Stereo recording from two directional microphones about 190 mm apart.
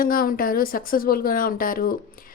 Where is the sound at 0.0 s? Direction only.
50° left (ahead or behind).